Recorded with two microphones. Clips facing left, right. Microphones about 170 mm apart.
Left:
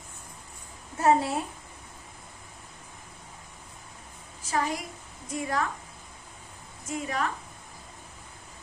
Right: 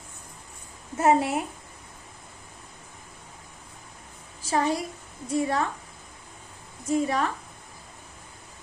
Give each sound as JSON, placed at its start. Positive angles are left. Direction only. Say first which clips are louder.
{"t": 0.9, "sound": "a woman's voice", "louder": "right 2 dB", "side_deg": -20}
{"t": 4.4, "sound": "a woman's voice", "louder": "right 4 dB", "side_deg": -30}
{"t": 6.8, "sound": "a woman's voice", "louder": "right 6 dB", "side_deg": -35}